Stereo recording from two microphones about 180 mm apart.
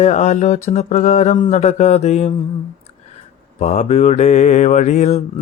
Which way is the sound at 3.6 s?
40° left (ahead or behind).